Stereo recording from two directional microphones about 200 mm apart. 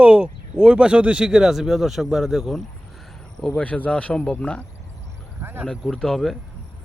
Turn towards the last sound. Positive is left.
turn(degrees=0)  # may be behind; listen again after turning